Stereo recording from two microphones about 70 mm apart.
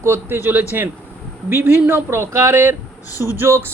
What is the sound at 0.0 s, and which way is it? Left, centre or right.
Speech, right.